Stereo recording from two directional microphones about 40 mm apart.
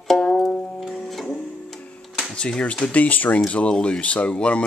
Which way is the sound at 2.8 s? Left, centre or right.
Left.